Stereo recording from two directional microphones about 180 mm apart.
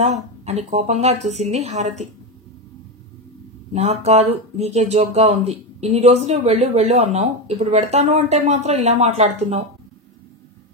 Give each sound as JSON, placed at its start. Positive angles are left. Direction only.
{"t": 0.0, "sound": "speech", "side_deg": -35}
{"t": 3.7, "sound": "speech", "side_deg": -35}